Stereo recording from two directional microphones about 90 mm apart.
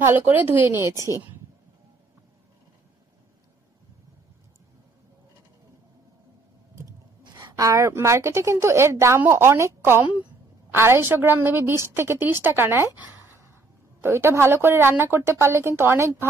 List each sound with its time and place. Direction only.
0.0 s a woman's voice: 20° right (ahead or behind)
7.2 s a sound: 50° right (ahead or behind)
7.9 s a woman's voice: 30° right (ahead or behind)